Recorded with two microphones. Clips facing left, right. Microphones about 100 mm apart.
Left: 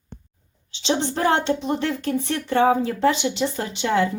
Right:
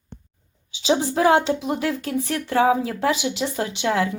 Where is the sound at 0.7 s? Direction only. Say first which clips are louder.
Right 2 dB; 5° right (ahead or behind).